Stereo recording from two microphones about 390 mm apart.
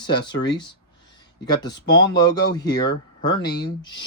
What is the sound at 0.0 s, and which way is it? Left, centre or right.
Speech, centre.